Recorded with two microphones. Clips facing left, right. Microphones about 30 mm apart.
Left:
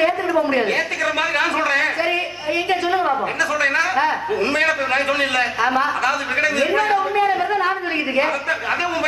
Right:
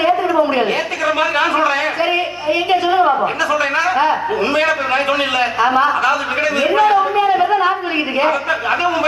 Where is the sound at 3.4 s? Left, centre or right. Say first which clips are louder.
Right 3 dB; centre.